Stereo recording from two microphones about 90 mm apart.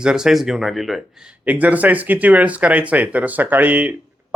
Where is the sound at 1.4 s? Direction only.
15° right (ahead or behind).